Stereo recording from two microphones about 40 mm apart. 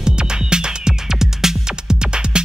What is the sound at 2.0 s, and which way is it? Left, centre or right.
Music, right.